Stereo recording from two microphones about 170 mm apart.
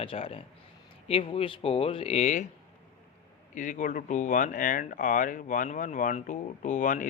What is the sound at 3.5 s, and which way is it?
Speech, 50° left (ahead or behind).